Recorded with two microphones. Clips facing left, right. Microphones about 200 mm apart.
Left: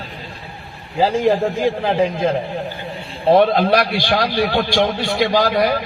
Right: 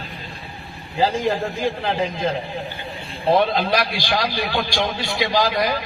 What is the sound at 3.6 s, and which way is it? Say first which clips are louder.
A man's voice: left 5 dB; 55° left (ahead or behind).